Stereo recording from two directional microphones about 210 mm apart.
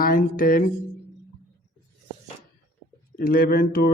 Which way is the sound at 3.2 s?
45° left (ahead or behind).